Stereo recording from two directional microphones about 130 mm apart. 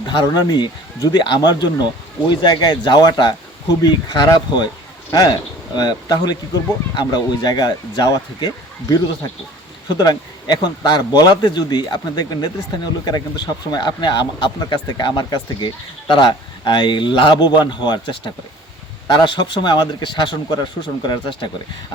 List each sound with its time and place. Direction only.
0.0 s speech: 35° left (ahead or behind)